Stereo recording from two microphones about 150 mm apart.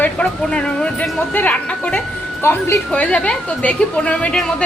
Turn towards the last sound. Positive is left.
turn(degrees=5)  # may be behind; listen again after turning